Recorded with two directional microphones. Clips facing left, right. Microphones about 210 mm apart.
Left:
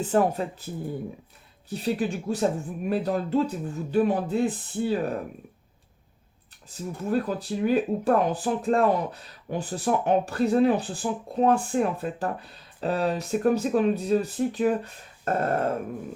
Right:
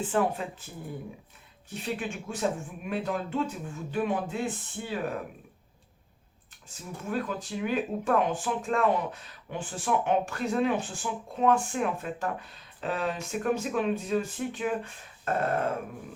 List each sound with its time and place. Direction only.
0.0 s speech: 40° left (ahead or behind)
1.7 s speech: 35° left (ahead or behind)
7.1 s speech: 35° left (ahead or behind)